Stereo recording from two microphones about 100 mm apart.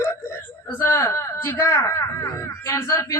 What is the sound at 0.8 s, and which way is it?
Speech, 30° left (ahead or behind).